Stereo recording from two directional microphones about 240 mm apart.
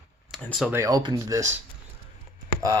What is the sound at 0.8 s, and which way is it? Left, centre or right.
Speech, centre.